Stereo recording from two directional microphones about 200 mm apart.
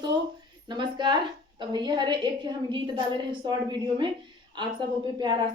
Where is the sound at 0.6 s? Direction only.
20° right (ahead or behind).